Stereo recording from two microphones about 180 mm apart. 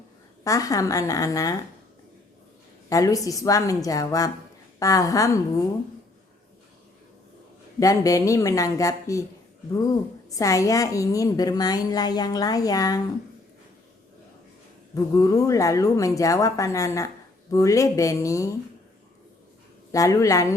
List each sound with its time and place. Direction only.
0.4 s a woman's voice: 20° left (ahead or behind)
2.9 s a woman's voice: 20° left (ahead or behind)
7.8 s a woman's voice: 20° left (ahead or behind)
14.9 s a woman's voice: 20° left (ahead or behind)
19.9 s a woman's voice: 15° left (ahead or behind)